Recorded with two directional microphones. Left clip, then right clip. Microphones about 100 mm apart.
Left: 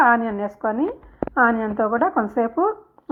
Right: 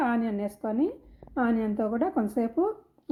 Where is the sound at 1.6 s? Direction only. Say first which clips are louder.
Left 8 dB; 15° right (ahead or behind).